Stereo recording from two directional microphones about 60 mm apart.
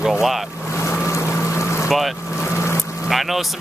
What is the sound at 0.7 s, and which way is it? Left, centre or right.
Boat, left.